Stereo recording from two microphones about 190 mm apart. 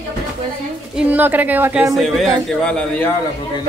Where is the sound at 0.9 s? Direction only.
10° right (ahead or behind).